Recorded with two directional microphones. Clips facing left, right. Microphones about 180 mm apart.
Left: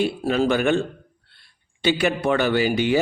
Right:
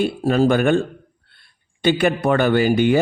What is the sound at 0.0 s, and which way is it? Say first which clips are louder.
A man's voice: right 4 dB; 45° right (ahead or behind).